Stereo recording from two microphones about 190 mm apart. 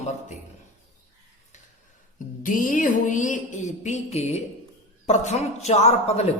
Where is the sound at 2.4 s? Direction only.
45° left (ahead or behind).